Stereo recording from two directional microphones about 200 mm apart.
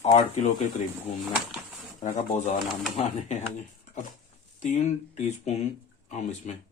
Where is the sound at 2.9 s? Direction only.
35° left (ahead or behind).